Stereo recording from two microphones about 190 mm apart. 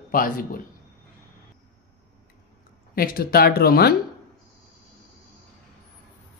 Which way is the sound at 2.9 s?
50° left (ahead or behind).